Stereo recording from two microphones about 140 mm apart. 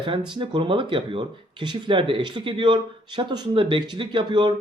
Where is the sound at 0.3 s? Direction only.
35° right (ahead or behind).